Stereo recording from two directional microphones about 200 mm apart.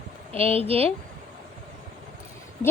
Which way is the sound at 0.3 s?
30° right (ahead or behind).